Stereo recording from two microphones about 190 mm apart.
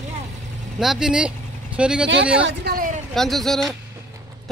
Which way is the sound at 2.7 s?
55° right (ahead or behind).